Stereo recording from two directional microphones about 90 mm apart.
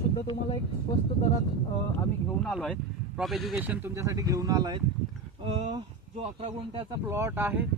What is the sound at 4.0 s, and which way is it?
Speech, 35° right (ahead or behind).